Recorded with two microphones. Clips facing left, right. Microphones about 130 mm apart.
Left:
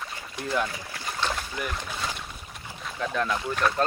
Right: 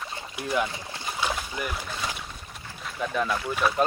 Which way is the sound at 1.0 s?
10° right (ahead or behind).